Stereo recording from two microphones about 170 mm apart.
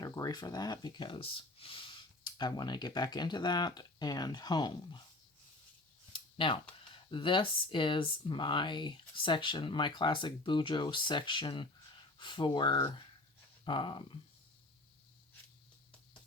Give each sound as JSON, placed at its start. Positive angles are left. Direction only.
{"t": 0.0, "sound": "speech", "side_deg": 20}
{"t": 6.1, "sound": "a sound", "side_deg": 30}
{"t": 6.9, "sound": "speech", "side_deg": 30}